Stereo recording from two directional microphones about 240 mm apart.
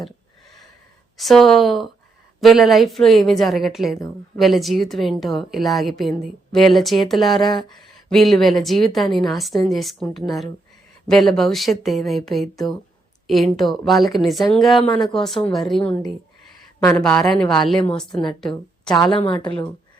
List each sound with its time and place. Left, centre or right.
1.1 s a woman's voice: centre
19.1 s a woman's voice: left